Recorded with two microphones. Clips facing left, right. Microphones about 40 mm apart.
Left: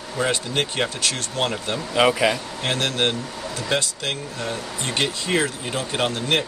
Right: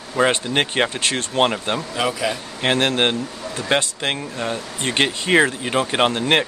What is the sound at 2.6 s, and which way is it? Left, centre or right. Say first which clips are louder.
Speech: right 5 dB; right.